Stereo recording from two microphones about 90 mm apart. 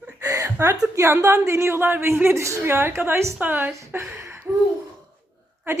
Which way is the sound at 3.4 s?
20° right (ahead or behind).